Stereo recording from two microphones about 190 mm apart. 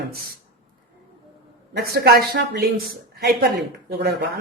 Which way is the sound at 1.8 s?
55° right (ahead or behind).